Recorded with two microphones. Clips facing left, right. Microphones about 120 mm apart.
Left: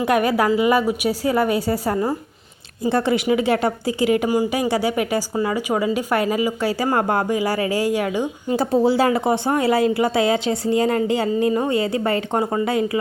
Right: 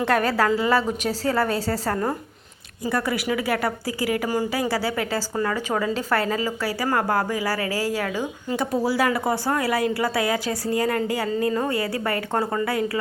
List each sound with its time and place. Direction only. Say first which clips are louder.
0.0 s a woman's voice: left 3 dB; 15° left (ahead or behind)
2.8 s a woman's voice: left 6 dB; 25° left (ahead or behind)